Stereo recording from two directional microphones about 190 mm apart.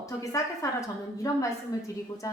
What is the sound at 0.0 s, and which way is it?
A woman's voice, 15° left (ahead or behind).